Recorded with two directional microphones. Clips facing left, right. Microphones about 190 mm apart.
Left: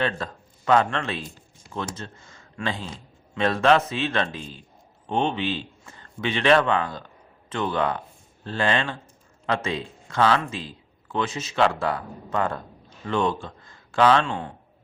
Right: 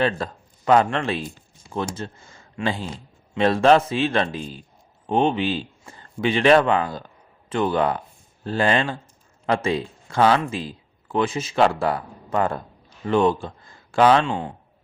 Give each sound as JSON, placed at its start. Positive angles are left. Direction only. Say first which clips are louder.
{"t": 0.0, "sound": "a man's voice", "louder": "right 4 dB", "side_deg": -30}